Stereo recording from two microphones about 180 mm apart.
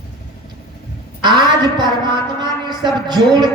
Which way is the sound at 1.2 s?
25° right (ahead or behind).